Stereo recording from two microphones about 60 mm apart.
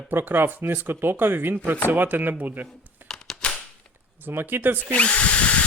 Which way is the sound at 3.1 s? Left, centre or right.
Centre.